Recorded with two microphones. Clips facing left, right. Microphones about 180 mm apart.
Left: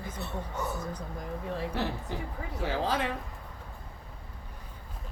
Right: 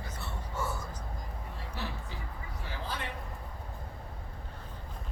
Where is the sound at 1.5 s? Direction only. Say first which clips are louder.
Left 9 dB; 90° left.